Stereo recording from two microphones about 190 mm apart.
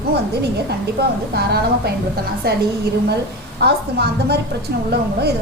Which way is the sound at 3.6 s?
60° right (ahead or behind).